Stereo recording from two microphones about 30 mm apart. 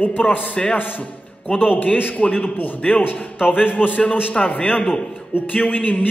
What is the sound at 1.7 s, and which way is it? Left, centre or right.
Speech, left.